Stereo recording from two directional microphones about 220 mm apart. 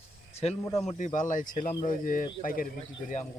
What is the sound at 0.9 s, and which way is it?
Speech, 35° left (ahead or behind).